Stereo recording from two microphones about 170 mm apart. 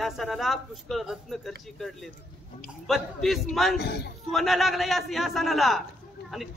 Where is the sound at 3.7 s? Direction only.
70° left (ahead or behind).